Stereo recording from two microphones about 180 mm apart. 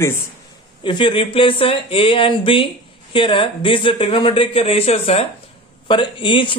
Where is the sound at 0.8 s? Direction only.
25° left (ahead or behind).